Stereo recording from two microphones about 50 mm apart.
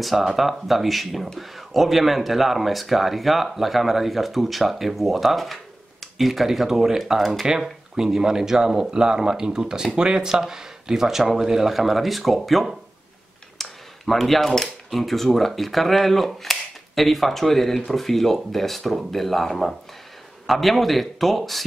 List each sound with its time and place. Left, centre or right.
0.0 s speech: centre